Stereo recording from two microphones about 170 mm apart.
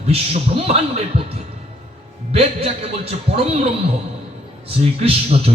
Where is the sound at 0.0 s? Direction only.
35° right (ahead or behind).